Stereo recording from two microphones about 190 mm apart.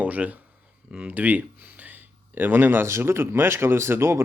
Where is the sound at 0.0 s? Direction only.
5° right (ahead or behind).